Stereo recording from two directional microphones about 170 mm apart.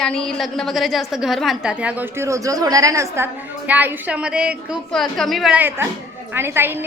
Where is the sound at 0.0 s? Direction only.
5° left (ahead or behind).